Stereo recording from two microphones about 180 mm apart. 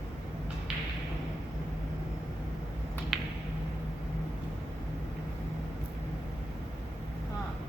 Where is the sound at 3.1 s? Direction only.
Centre (ahead or behind).